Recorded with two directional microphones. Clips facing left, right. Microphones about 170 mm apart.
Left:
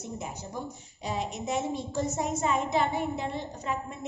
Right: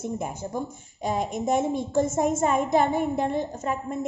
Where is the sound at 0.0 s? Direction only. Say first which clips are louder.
Right 7 dB; 50° right (ahead or behind).